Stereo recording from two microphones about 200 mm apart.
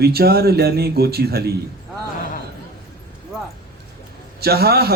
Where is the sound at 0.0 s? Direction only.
50° right (ahead or behind).